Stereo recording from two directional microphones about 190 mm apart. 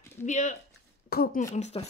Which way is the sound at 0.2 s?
40° left (ahead or behind).